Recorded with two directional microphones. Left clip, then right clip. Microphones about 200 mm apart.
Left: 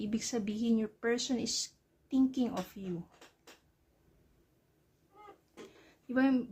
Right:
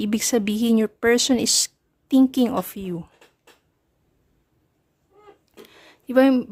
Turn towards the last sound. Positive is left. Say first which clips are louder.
# right 14 dB
turn(degrees=-50)  # may be behind; listen again after turning